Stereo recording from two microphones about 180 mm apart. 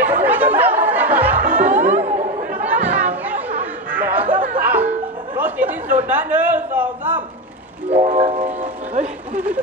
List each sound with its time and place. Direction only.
0.0 s chatter: 10° right (ahead or behind)
2.6 s chatter: 10° right (ahead or behind)
3.9 s music: 10° right (ahead or behind)
5.4 s chatter: 10° right (ahead or behind)
6.0 s a sound: 10° right (ahead or behind)
7.9 s music: 35° right (ahead or behind)